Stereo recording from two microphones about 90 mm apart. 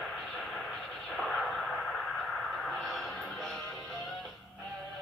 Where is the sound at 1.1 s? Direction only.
5° left (ahead or behind).